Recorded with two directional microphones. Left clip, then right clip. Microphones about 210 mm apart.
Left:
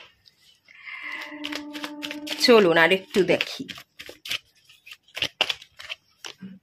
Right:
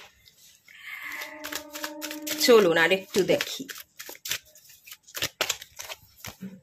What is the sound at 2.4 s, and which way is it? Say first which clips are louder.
Speech: left 2 dB; 15° left (ahead or behind).